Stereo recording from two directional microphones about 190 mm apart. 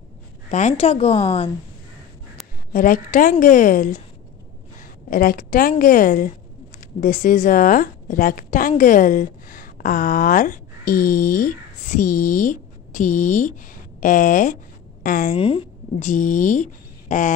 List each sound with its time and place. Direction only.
0.5 s a woman's voice: 35° left (ahead or behind)
2.7 s a woman's voice: 45° left (ahead or behind)
5.1 s a woman's voice: 50° left (ahead or behind)
15.3 s speech: 30° left (ahead or behind)